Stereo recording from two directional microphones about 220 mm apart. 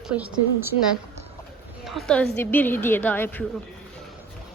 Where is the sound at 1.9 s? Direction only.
Centre (ahead or behind).